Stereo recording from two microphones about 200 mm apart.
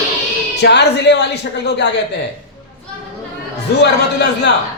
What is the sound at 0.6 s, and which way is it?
A man's voice, 60° left (ahead or behind).